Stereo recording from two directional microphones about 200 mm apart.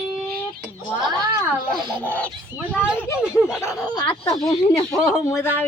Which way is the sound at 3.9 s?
25° left (ahead or behind).